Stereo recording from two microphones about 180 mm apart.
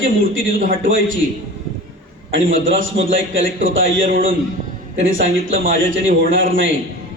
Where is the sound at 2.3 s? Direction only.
90° right.